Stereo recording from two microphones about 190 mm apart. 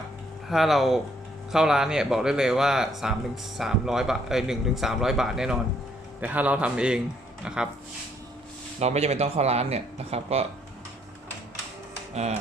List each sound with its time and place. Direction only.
0.4 s a man's voice: centre (ahead or behind)
8.8 s speech: 35° right (ahead or behind)